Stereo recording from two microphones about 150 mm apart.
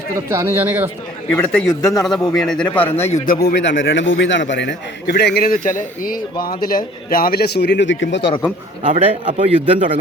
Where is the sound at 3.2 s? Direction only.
80° left.